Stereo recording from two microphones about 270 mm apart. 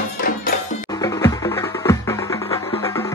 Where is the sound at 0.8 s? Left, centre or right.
Centre.